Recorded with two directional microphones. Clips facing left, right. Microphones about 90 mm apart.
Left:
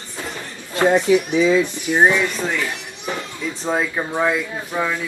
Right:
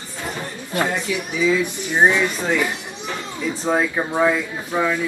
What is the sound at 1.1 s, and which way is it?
Speech, 35° left (ahead or behind).